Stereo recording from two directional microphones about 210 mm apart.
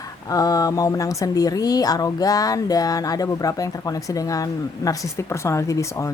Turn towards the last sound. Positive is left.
turn(degrees=15)  # may be behind; listen again after turning